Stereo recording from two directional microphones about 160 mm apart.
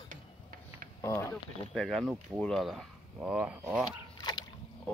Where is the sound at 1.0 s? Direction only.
15° left (ahead or behind).